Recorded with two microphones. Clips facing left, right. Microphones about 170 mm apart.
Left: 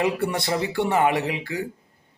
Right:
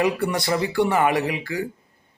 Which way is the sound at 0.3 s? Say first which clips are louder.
Right 2 dB; 25° left (ahead or behind).